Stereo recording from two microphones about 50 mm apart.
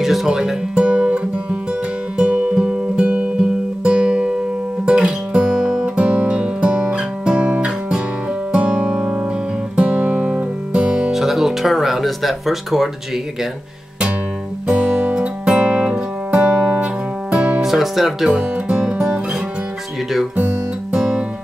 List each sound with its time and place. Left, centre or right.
0.0 s speech: centre
0.7 s music: centre
11.1 s music: centre
14.7 s music: right
17.6 s music: centre
20.9 s music: centre